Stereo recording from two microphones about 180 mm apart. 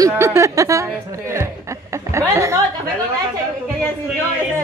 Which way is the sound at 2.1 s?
15° right (ahead or behind).